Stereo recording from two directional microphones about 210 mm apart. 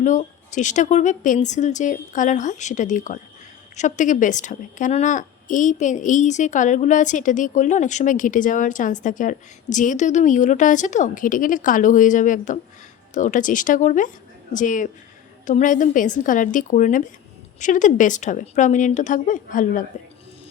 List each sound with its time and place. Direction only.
0.0 s a woman's voice: 35° left (ahead or behind)